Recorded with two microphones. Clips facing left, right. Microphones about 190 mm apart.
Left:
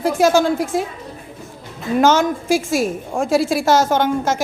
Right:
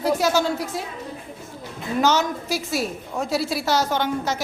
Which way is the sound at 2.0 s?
50° left (ahead or behind).